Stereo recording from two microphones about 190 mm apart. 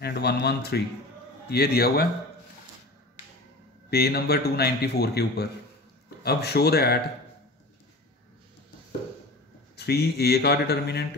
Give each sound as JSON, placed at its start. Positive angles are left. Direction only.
{"t": 0.0, "sound": "a man's voice", "side_deg": 60}
{"t": 3.9, "sound": "a man's voice", "side_deg": 55}
{"t": 9.8, "sound": "a man's voice", "side_deg": 60}